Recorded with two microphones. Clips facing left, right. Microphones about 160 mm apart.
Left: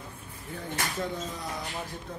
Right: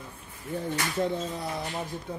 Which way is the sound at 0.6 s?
30° right (ahead or behind).